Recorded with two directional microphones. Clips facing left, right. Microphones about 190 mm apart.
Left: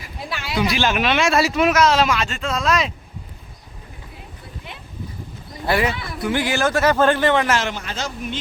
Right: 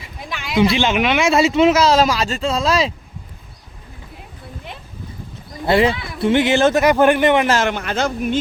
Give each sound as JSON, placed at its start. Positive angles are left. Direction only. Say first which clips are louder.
{"t": 0.5, "sound": "speech", "louder": "right 5 dB", "side_deg": -20}
{"t": 5.6, "sound": "speech", "louder": "right 5 dB", "side_deg": -25}
{"t": 7.6, "sound": "a man's voice", "louder": "right 7 dB", "side_deg": -60}